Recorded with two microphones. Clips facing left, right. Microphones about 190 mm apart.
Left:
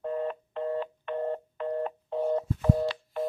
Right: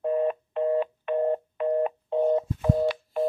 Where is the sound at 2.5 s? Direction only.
10° right (ahead or behind).